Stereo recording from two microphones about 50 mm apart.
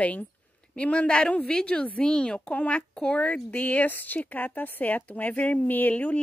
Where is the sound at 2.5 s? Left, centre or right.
Left.